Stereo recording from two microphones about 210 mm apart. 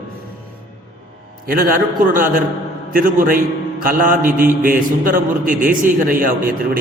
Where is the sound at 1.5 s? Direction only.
40° right (ahead or behind).